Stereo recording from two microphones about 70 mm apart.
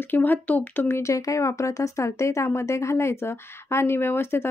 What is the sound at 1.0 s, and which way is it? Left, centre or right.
Speech, left.